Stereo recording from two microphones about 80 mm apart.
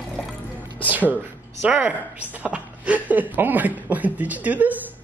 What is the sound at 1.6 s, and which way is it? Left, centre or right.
A woman's voice, centre.